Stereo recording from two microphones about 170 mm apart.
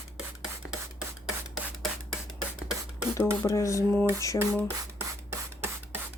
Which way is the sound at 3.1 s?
15° left (ahead or behind).